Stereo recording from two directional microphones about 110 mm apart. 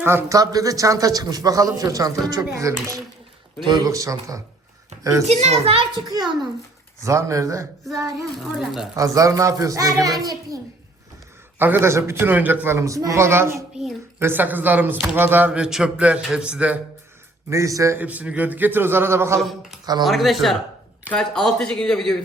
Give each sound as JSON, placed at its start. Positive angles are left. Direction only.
{"t": 0.0, "sound": "a man's voice", "side_deg": -20}
{"t": 3.6, "sound": "a man's voice", "side_deg": -40}
{"t": 5.3, "sound": "a child's voice", "side_deg": -75}
{"t": 5.7, "sound": "a man's voice", "side_deg": -40}
{"t": 7.0, "sound": "a man's voice", "side_deg": -30}
{"t": 8.5, "sound": "speech", "side_deg": -5}
{"t": 9.0, "sound": "a man's voice", "side_deg": -30}
{"t": 11.6, "sound": "a man's voice", "side_deg": -20}
{"t": 17.5, "sound": "a man's voice", "side_deg": -30}
{"t": 17.9, "sound": "speech", "side_deg": -15}
{"t": 19.4, "sound": "speech", "side_deg": 0}
{"t": 19.8, "sound": "speech", "side_deg": -40}
{"t": 20.1, "sound": "speech", "side_deg": 0}